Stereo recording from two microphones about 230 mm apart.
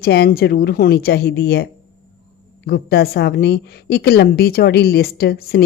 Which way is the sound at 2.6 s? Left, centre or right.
Left.